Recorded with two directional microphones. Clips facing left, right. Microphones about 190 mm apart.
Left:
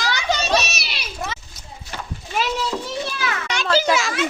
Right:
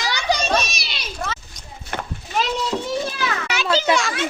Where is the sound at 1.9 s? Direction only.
55° right (ahead or behind).